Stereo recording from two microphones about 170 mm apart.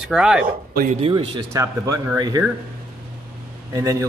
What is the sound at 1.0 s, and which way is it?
Speech, 30° right (ahead or behind).